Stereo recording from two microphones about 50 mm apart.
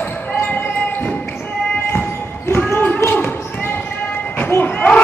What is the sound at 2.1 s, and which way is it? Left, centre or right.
Basketball bounce, left.